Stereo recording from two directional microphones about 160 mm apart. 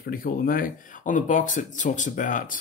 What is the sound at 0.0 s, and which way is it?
Speech, 65° left (ahead or behind).